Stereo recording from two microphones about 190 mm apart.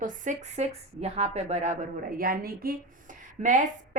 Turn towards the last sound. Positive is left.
turn(degrees=-45)  # may be behind; listen again after turning